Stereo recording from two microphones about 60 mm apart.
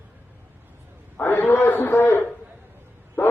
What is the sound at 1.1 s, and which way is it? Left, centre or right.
A man's voice, left.